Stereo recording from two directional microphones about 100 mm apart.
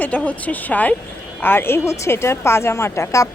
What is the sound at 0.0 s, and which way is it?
A woman's voice, 15° left (ahead or behind).